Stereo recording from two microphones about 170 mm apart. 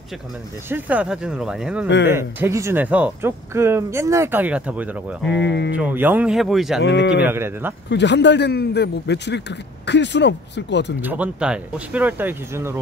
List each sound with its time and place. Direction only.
0.7 s speech: 10° right (ahead or behind)
5.3 s speech: 90° left
5.7 s speech: 10° right (ahead or behind)
6.8 s speech: 90° left
7.2 s speech: 15° right (ahead or behind)
7.9 s a man's voice: 90° left
11.0 s speech: 10° right (ahead or behind)